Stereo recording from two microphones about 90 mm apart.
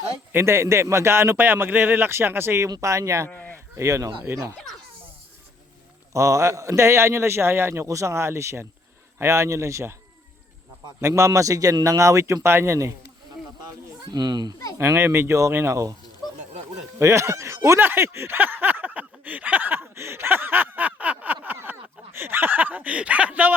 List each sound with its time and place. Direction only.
0.3 s speech: 30° right (ahead or behind)
2.6 s a man's voice: 40° right (ahead or behind)
3.2 s speech: 20° left (ahead or behind)
3.8 s a man's voice: 35° right (ahead or behind)
6.1 s a man's voice: 35° right (ahead or behind)
14.0 s a child's voice: 50° right (ahead or behind)
14.8 s speech: 30° right (ahead or behind)
17.0 s speech: 35° right (ahead or behind)